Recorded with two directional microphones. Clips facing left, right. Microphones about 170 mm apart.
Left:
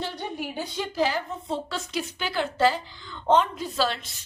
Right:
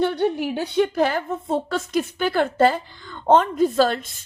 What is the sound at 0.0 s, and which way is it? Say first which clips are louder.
A woman's voice: right 11 dB; 65° right (ahead or behind).